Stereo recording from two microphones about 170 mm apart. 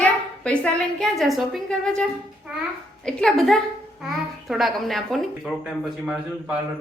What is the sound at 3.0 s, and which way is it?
A woman's voice, centre (ahead or behind).